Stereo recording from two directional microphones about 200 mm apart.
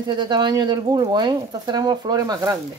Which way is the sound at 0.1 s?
20° right (ahead or behind).